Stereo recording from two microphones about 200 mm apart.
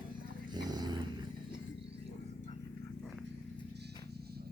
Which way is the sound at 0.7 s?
20° right (ahead or behind).